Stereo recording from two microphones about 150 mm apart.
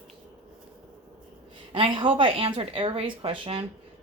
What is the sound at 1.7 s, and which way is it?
Speech, 35° right (ahead or behind).